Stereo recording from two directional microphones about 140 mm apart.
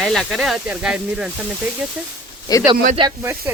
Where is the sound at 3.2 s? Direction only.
15° right (ahead or behind).